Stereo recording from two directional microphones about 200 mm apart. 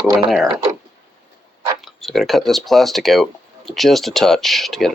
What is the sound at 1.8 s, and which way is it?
Speech, centre (ahead or behind).